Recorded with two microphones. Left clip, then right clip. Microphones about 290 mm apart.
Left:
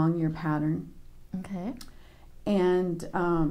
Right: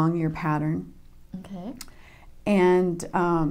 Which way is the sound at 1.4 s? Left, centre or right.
Left.